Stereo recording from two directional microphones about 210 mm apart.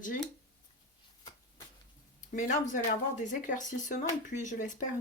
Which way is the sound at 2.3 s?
35° left (ahead or behind).